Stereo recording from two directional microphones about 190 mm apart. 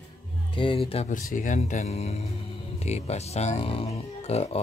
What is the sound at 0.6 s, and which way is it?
Speech, 30° left (ahead or behind).